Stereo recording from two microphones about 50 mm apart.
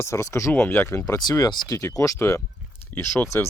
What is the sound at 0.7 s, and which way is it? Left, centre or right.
Speech, left.